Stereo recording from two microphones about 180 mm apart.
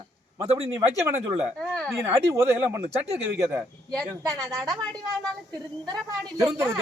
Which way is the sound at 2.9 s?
35° right (ahead or behind).